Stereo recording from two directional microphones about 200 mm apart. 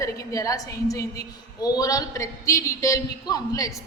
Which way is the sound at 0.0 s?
15° left (ahead or behind).